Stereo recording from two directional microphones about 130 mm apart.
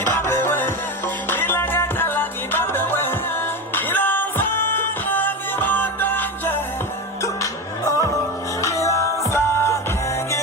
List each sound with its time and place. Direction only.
0.0 s music: 20° left (ahead or behind)